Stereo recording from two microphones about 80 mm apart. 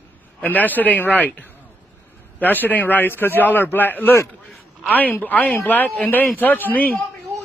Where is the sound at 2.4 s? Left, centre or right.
Left.